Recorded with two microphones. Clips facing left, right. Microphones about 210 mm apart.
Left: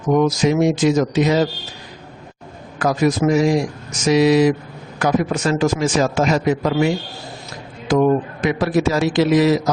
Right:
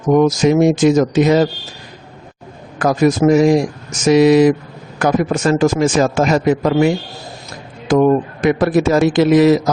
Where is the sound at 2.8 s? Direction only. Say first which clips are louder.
Right 4 dB; 50° right (ahead or behind).